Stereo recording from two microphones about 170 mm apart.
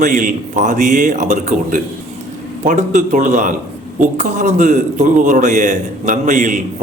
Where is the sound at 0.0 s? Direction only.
50° right (ahead or behind).